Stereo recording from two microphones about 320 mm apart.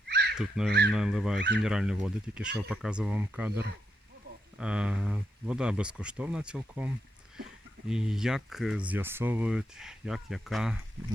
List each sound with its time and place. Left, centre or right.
0.1 s a sound: right
0.3 s speech: centre
4.6 s speech: centre